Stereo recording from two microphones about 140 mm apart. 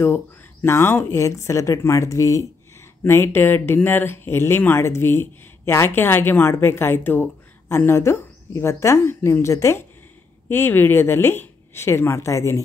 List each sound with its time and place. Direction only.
0.0 s speech: 15° left (ahead or behind)